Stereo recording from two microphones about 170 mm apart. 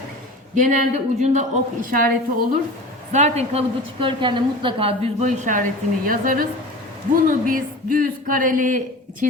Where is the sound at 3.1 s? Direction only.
40° right (ahead or behind).